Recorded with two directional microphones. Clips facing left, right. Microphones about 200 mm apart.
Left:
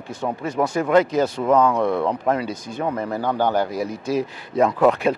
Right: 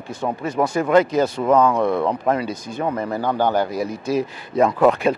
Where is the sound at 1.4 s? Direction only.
25° right (ahead or behind).